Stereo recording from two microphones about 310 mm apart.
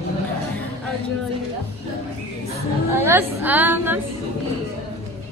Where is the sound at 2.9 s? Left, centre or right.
Centre.